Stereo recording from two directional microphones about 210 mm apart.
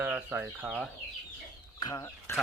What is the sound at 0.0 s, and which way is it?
Speech, 5° right (ahead or behind).